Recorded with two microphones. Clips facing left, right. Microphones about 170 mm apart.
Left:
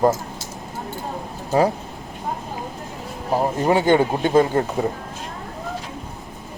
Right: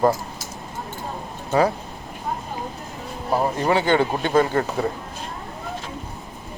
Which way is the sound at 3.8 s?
15° left (ahead or behind).